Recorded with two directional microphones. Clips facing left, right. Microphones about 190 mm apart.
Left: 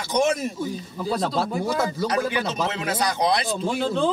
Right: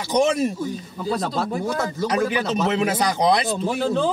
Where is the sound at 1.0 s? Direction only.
Centre (ahead or behind).